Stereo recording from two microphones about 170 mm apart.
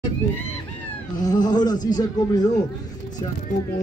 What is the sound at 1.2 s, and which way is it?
Speech, 25° left (ahead or behind).